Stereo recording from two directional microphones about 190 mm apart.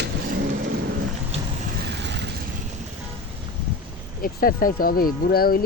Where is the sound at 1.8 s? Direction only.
65° right (ahead or behind).